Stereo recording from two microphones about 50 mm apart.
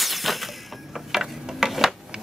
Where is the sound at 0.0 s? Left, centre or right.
Centre.